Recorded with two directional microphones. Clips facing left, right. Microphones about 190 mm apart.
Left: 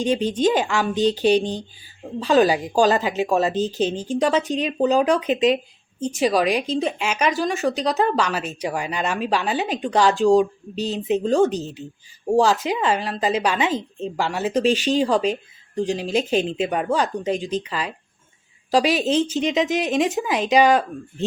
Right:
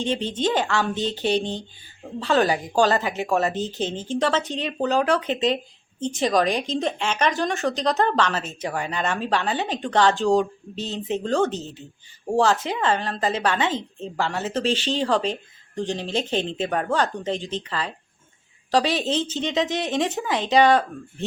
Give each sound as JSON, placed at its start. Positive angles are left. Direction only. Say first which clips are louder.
{"t": 0.0, "sound": "speech", "louder": "left 5 dB", "side_deg": 15}
{"t": 3.5, "sound": "speech", "louder": "left 5 dB", "side_deg": -20}
{"t": 3.8, "sound": "speech", "louder": "left 3 dB", "side_deg": 15}